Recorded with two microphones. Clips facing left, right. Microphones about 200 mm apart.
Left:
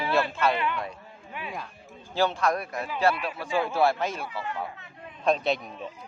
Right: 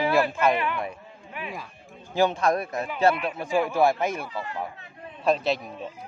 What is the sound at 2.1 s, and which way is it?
A man's voice, 15° right (ahead or behind).